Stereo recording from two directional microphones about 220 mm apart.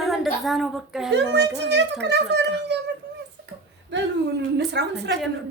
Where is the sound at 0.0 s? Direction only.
Centre (ahead or behind).